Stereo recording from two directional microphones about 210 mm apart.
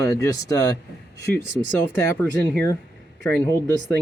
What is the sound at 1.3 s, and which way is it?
Speech, 60° right (ahead or behind).